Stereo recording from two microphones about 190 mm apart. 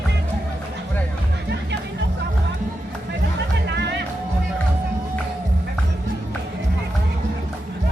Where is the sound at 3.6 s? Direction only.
60° right (ahead or behind).